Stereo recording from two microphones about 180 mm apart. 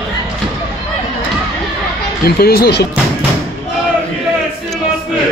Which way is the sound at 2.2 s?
60° left (ahead or behind).